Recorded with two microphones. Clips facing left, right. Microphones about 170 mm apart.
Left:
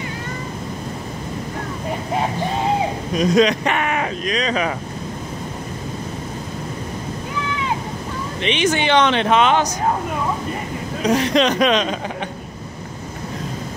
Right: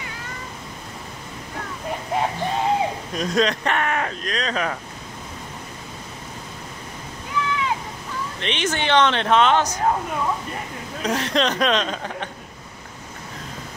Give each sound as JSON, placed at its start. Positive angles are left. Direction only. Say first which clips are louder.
{"t": 3.2, "sound": "speech", "louder": "left 6 dB", "side_deg": 15}
{"t": 8.4, "sound": "speech", "louder": "left 6 dB", "side_deg": 10}
{"t": 11.0, "sound": "speech", "louder": "left 5 dB", "side_deg": 15}